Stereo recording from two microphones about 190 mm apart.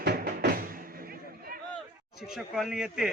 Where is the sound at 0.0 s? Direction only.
60° right (ahead or behind).